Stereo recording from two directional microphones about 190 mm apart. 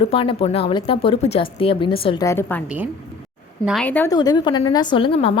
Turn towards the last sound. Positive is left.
turn(degrees=30)  # may be behind; listen again after turning